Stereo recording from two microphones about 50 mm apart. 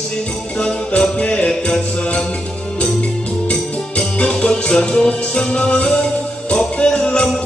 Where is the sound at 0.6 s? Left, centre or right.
Left.